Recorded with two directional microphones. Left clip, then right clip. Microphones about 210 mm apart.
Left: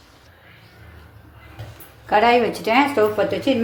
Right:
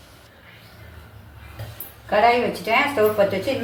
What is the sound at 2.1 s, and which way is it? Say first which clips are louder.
Speech: left 2 dB; 55° left (ahead or behind).